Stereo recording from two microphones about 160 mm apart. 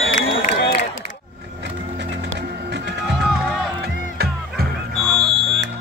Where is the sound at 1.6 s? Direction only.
90° right.